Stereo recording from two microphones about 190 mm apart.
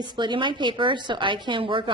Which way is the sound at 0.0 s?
25° right (ahead or behind).